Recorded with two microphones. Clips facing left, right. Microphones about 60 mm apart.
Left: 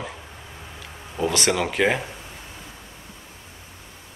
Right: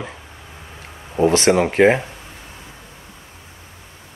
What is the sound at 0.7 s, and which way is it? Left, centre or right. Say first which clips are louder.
Speech: right 8 dB; right.